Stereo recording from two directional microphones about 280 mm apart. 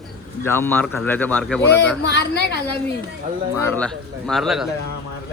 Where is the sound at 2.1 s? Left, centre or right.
Left.